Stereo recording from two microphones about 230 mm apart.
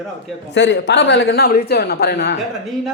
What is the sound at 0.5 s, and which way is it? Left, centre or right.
A woman's voice, left.